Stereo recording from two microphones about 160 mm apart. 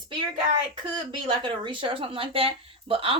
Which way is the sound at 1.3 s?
30° right (ahead or behind).